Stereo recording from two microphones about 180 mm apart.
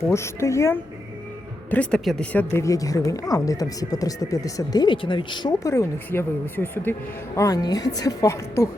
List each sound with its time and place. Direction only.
0.0 s speech: 15° left (ahead or behind)